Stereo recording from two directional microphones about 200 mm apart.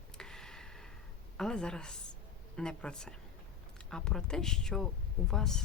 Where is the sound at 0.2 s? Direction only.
5° left (ahead or behind).